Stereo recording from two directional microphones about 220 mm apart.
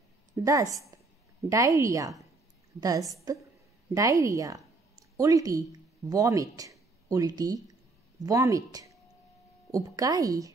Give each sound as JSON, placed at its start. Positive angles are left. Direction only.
{"t": 0.3, "sound": "speech", "side_deg": -15}